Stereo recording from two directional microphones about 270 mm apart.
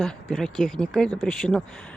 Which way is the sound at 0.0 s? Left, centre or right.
Centre.